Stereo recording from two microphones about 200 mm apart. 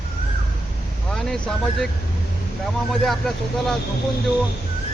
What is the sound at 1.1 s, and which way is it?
Speech, centre (ahead or behind).